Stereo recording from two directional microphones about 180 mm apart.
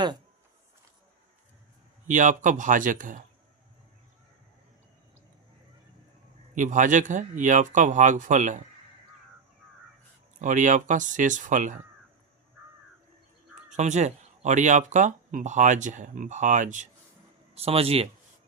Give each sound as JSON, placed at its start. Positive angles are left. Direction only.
{"t": 2.0, "sound": "speech", "side_deg": -45}
{"t": 6.5, "sound": "speech", "side_deg": -45}
{"t": 10.4, "sound": "speech", "side_deg": -45}
{"t": 13.7, "sound": "speech", "side_deg": -40}
{"t": 17.5, "sound": "speech", "side_deg": -35}